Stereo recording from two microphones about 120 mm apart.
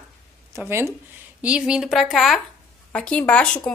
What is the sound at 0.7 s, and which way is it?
Speech, 20° right (ahead or behind).